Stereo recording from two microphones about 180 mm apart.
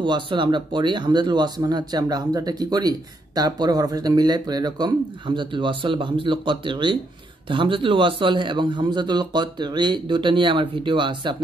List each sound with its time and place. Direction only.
0.0 s speech: 25° right (ahead or behind)